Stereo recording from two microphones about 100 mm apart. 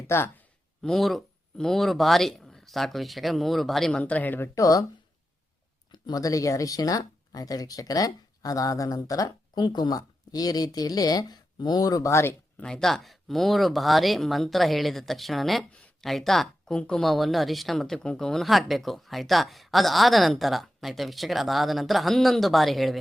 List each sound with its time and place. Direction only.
0.1 s speech: 25° left (ahead or behind)
0.8 s speech: centre (ahead or behind)
4.0 s speech: 15° left (ahead or behind)
4.5 s speech: 35° left (ahead or behind)
5.9 s speech: 40° left (ahead or behind)
12.6 s speech: 5° left (ahead or behind)
15.7 s a sound: 10° left (ahead or behind)
16.0 s speech: centre (ahead or behind)